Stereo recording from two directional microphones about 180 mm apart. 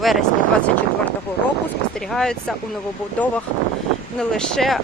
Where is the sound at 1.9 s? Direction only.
5° left (ahead or behind).